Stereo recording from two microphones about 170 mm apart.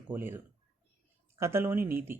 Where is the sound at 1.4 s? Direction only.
15° right (ahead or behind).